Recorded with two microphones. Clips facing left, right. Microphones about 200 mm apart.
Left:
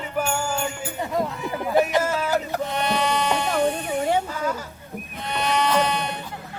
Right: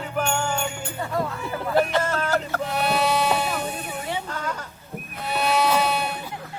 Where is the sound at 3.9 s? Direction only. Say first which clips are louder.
Left 8 dB; 45° left (ahead or behind).